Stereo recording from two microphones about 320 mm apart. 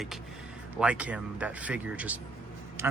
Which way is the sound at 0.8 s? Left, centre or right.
Centre.